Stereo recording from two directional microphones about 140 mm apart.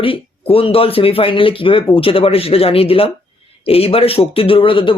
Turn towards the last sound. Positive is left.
turn(degrees=40)  # may be behind; listen again after turning